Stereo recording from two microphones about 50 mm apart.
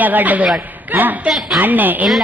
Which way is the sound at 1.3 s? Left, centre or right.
Centre.